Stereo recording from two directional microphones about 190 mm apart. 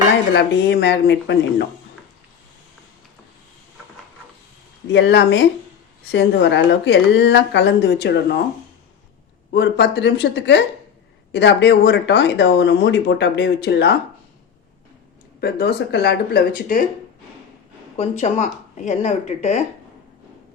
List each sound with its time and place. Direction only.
0.3 s speech: 65° left (ahead or behind)
4.9 s speech: 65° left (ahead or behind)
9.5 s speech: 60° left (ahead or behind)
15.4 s speech: 55° left (ahead or behind)
17.9 s speech: 35° left (ahead or behind)